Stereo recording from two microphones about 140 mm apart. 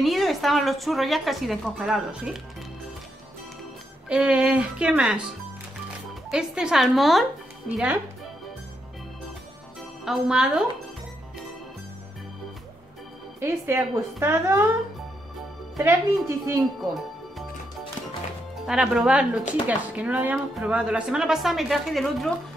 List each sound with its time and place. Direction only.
0.0 s speech: centre (ahead or behind)
4.1 s a woman's voice: 5° right (ahead or behind)
6.3 s a woman's voice: 5° right (ahead or behind)
9.8 s music: centre (ahead or behind)
13.4 s a woman's voice: 20° right (ahead or behind)
15.8 s speech: 20° right (ahead or behind)
18.7 s a woman's voice: 5° right (ahead or behind)